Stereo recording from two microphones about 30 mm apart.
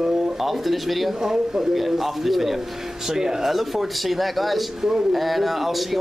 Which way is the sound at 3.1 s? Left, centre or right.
Centre.